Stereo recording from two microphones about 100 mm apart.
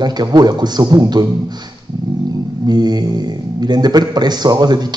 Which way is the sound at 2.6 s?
45° right (ahead or behind).